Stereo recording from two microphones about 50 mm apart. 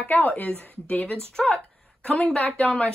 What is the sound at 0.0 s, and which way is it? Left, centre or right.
Speech, left.